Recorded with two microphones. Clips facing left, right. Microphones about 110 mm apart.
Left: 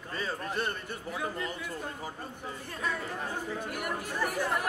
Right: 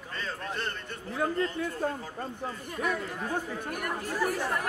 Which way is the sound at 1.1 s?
50° right (ahead or behind).